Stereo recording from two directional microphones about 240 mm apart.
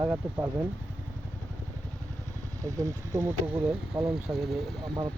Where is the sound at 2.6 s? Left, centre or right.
Centre.